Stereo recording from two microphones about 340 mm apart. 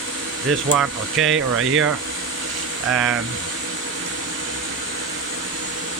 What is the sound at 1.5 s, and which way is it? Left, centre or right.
Speech, right.